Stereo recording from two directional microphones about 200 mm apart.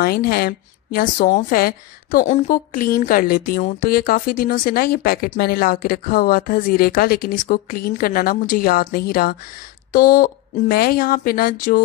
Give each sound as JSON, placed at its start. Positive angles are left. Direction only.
{"t": 0.0, "sound": "a woman's voice", "side_deg": 50}